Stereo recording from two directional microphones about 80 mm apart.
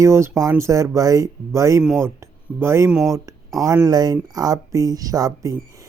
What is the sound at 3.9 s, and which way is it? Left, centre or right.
Speech, right.